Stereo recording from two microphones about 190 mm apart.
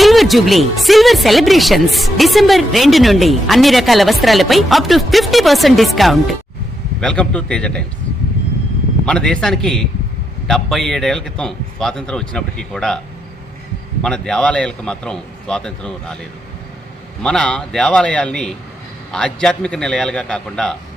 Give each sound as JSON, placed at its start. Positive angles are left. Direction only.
{"t": 0.0, "sound": "speech", "side_deg": 0}
{"t": 9.0, "sound": "speech", "side_deg": 5}
{"t": 14.0, "sound": "speech", "side_deg": 5}
{"t": 17.2, "sound": "speech", "side_deg": 5}